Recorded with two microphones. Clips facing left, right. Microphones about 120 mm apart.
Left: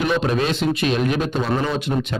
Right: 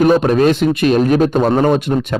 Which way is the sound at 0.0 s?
45° right (ahead or behind).